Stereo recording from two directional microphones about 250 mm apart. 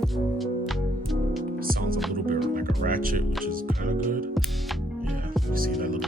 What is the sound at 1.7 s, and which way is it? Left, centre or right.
Music, right.